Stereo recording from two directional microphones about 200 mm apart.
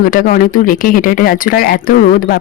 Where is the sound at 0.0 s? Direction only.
45° left (ahead or behind).